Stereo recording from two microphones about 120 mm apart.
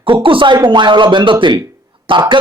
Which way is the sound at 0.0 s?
45° right (ahead or behind).